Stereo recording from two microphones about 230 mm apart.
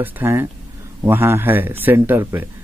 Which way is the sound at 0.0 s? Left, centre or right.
Centre.